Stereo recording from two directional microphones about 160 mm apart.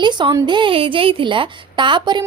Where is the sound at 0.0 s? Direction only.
30° right (ahead or behind).